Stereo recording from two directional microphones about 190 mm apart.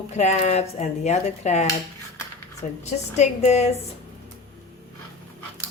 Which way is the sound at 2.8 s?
35° left (ahead or behind).